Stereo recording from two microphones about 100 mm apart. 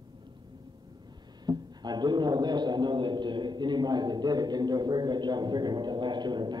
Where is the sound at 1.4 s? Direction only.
45° right (ahead or behind).